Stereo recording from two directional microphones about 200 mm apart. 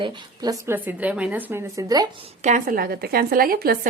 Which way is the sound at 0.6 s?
10° right (ahead or behind).